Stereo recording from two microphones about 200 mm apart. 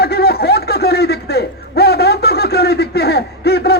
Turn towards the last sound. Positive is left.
turn(degrees=55)  # may be behind; listen again after turning